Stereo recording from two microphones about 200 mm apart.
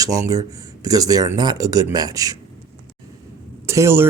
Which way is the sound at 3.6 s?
15° right (ahead or behind).